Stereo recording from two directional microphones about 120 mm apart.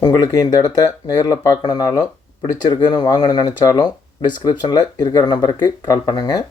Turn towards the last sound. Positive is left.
turn(degrees=35)  # may be behind; listen again after turning